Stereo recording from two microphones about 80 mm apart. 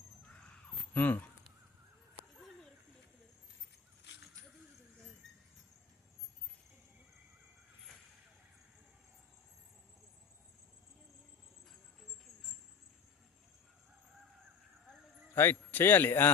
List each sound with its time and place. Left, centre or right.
0.9 s a man's voice: left
5.2 s a sound: centre
15.4 s a man's voice: left